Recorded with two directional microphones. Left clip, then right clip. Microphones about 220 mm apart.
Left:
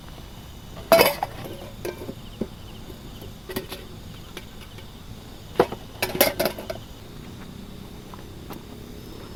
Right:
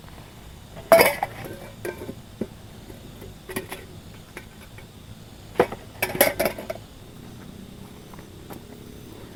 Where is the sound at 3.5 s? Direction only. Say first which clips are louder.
Even; 10° left (ahead or behind).